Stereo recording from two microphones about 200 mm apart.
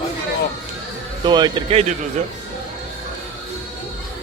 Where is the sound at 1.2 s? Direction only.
20° right (ahead or behind).